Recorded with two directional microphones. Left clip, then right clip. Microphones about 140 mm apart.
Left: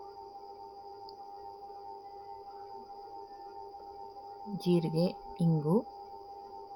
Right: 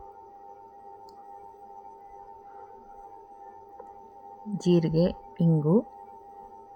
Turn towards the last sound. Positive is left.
turn(degrees=-40)  # may be behind; listen again after turning